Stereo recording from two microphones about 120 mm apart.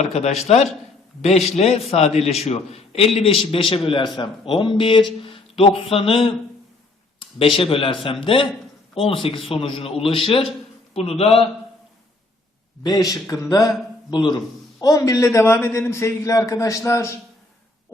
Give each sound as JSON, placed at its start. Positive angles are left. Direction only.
{"t": 0.0, "sound": "a man's voice", "side_deg": 65}
{"t": 7.2, "sound": "a man's voice", "side_deg": 50}
{"t": 12.8, "sound": "a man's voice", "side_deg": 30}